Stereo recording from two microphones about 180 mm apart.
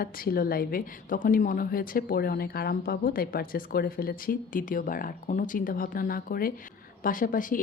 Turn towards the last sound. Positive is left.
turn(degrees=50)  # may be behind; listen again after turning